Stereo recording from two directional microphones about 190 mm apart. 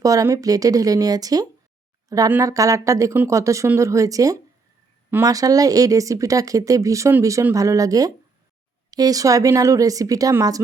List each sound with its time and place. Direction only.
0.0 s speech: 15° right (ahead or behind)